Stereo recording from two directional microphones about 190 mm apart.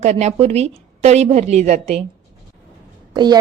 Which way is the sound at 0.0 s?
35° right (ahead or behind).